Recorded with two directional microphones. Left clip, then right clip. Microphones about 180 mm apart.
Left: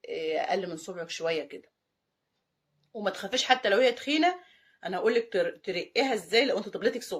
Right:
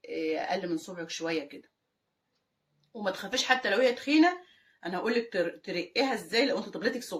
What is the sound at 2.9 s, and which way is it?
Speech, 45° left (ahead or behind).